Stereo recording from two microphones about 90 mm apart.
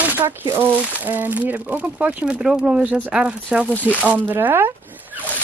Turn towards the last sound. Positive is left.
turn(degrees=-20)  # may be behind; listen again after turning